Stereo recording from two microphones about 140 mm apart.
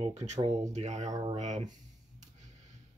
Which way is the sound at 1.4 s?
55° right (ahead or behind).